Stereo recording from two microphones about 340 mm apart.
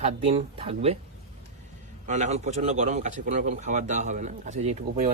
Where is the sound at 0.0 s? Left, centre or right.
Centre.